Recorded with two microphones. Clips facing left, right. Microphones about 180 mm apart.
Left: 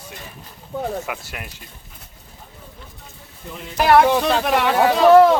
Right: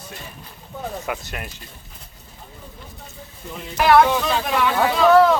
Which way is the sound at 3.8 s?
65° left (ahead or behind).